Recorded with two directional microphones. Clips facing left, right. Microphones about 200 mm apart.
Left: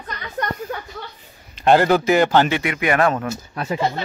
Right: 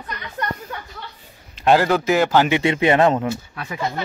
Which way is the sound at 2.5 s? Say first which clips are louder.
Right 4 dB; 25° right (ahead or behind).